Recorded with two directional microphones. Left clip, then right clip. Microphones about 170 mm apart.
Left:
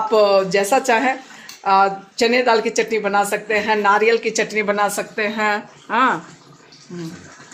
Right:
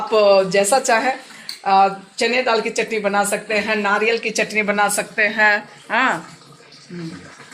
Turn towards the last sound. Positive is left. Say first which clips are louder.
# left 1 dB
turn(degrees=15)  # may be behind; listen again after turning